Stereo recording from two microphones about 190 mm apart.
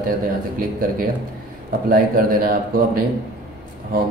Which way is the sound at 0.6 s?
45° right (ahead or behind).